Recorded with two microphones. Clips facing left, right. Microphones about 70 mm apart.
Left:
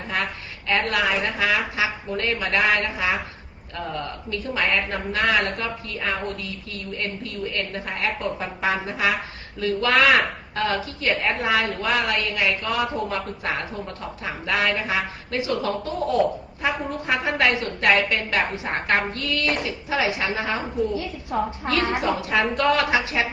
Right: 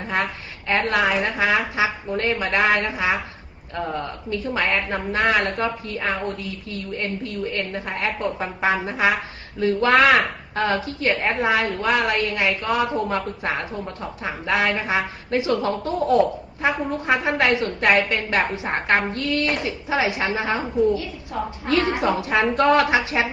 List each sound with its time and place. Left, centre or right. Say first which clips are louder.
0.0 s a sound: right 3 dB; right
0.7 s a woman's voice: right 2 dB; right
20.9 s a woman's voice: even; left
21.7 s a woman's voice: right 4 dB; right